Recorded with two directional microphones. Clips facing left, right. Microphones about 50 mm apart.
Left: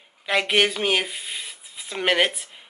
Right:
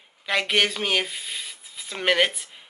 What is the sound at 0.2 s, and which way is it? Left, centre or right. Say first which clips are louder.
Speech: left 2 dB; centre.